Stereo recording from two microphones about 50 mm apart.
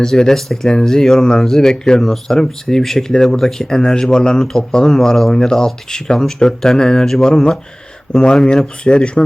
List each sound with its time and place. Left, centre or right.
0.0 s speech: centre
8.1 s speech: left